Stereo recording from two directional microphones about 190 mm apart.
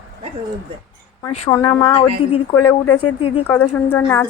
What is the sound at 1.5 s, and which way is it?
Speech, 30° left (ahead or behind).